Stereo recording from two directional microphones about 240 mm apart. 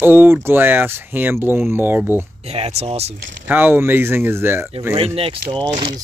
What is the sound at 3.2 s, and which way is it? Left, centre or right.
Speech, right.